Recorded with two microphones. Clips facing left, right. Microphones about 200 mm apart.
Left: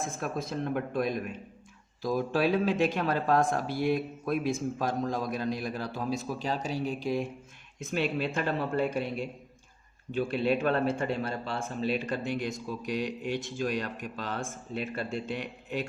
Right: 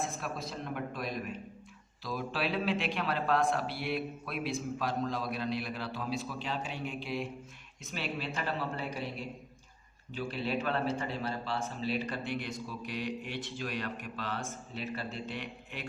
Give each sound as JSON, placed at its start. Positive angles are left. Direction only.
{"t": 0.0, "sound": "a man's voice", "side_deg": 50}
{"t": 10.2, "sound": "a man's voice", "side_deg": 50}